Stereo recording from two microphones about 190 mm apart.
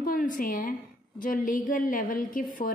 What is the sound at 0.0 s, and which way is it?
A woman's voice, 45° left (ahead or behind).